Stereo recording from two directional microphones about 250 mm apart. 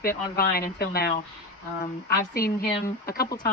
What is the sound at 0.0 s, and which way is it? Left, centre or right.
Speech, left.